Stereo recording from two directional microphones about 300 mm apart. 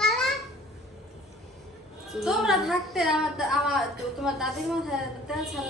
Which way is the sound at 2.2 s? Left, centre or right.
Centre.